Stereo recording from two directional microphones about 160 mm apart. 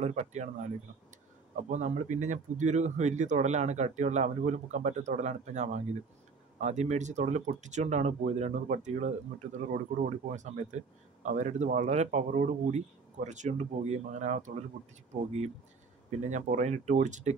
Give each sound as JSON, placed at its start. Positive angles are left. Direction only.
{"t": 0.0, "sound": "speech", "side_deg": -45}
{"t": 1.6, "sound": "speech", "side_deg": -50}
{"t": 16.1, "sound": "speech", "side_deg": -50}